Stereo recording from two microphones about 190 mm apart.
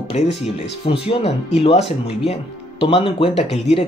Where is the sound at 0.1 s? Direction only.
35° left (ahead or behind).